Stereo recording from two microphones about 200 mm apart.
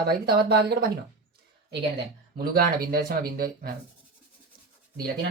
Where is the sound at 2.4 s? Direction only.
45° right (ahead or behind).